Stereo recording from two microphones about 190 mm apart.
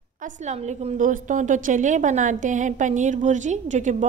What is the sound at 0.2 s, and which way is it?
A woman's voice, 35° right (ahead or behind).